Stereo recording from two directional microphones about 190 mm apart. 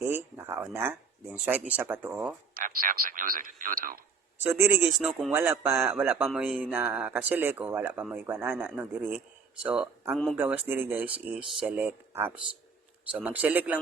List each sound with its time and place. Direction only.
0.3 s speech: 10° right (ahead or behind)
2.6 s speech: 50° right (ahead or behind)
4.4 s speech: 10° right (ahead or behind)
4.9 s speech: centre (ahead or behind)
5.3 s speech: 10° right (ahead or behind)